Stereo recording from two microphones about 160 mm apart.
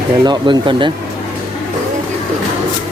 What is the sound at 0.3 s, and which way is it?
Speech, 30° right (ahead or behind).